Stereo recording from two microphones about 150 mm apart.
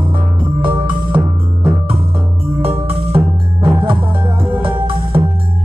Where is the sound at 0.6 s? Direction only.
30° right (ahead or behind).